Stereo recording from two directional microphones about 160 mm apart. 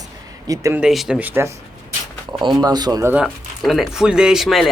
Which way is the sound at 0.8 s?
Centre (ahead or behind).